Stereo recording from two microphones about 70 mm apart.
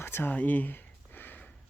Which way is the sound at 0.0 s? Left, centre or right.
Left.